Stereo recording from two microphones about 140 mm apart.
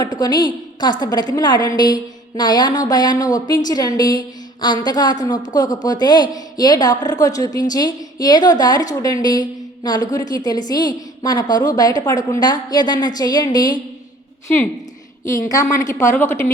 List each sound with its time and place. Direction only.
0.0 s a woman's voice: 30° left (ahead or behind)
15.4 s a woman's voice: 25° left (ahead or behind)